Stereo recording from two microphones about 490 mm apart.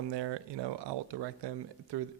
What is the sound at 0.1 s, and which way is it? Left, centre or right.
Speech, right.